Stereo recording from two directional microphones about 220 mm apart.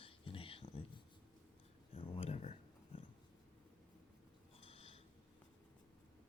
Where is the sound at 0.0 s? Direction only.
25° left (ahead or behind).